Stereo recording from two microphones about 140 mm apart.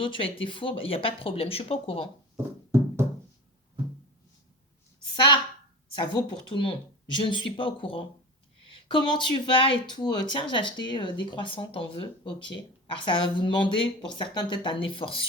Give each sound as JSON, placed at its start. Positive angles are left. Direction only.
{"t": 0.0, "sound": "speech", "side_deg": 40}
{"t": 5.1, "sound": "a woman's voice", "side_deg": 35}